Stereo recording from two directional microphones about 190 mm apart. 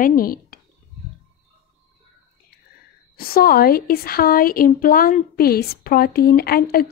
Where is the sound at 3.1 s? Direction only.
50° left (ahead or behind).